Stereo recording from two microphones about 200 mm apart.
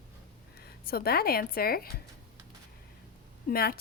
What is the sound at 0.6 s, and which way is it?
Speech, 50° left (ahead or behind).